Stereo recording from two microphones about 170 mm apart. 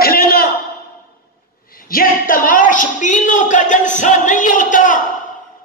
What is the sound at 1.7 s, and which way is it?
Speech, 60° left (ahead or behind).